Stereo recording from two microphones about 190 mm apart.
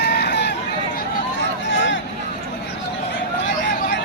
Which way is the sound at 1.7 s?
75° left (ahead or behind).